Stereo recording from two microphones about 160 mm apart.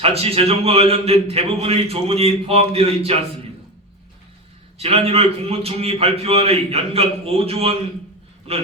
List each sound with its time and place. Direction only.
0.0 s a man's voice: 40° right (ahead or behind)
4.8 s a man's voice: 40° right (ahead or behind)